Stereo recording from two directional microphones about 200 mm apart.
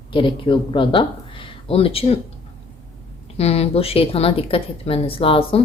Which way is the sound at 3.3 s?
30° left (ahead or behind).